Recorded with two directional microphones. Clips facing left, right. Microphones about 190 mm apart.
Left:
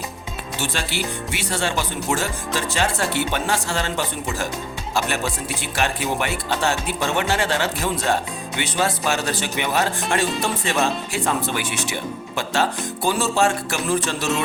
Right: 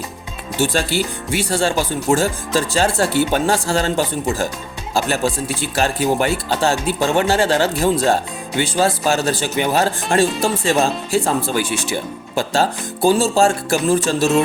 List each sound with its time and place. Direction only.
0.6 s speech: 40° right (ahead or behind)